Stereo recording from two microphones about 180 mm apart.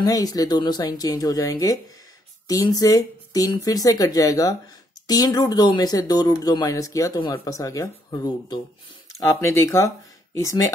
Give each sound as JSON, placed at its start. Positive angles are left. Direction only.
{"t": 0.0, "sound": "speech", "side_deg": 20}